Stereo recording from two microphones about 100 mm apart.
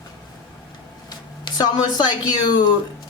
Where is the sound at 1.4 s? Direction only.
45° left (ahead or behind).